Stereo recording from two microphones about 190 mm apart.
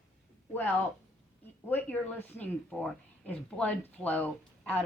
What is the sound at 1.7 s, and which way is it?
Speech, 10° left (ahead or behind).